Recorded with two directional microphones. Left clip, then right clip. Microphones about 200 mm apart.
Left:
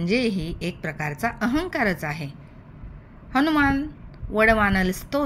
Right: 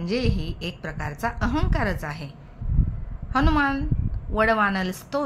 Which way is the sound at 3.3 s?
10° left (ahead or behind).